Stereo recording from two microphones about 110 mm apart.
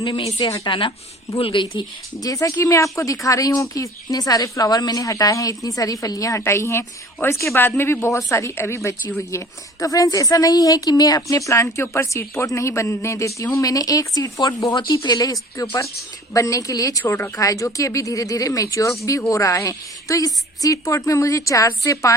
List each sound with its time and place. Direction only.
0.0 s speech: 45° left (ahead or behind)
2.2 s speech: 30° left (ahead or behind)